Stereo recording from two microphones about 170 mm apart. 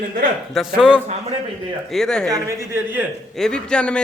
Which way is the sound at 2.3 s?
15° right (ahead or behind).